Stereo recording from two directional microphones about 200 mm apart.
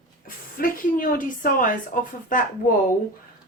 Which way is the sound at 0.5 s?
45° left (ahead or behind).